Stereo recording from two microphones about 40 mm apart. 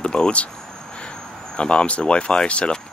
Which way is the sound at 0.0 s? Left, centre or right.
Left.